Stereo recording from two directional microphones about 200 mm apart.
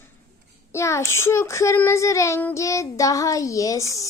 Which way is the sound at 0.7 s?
15° left (ahead or behind).